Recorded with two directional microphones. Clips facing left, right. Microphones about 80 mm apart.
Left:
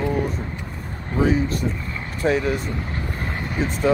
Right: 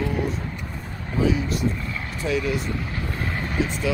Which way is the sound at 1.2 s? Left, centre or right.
Left.